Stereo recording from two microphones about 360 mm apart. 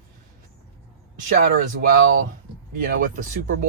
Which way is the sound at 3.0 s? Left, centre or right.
Right.